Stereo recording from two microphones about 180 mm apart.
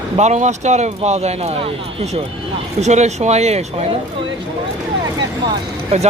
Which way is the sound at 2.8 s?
40° right (ahead or behind).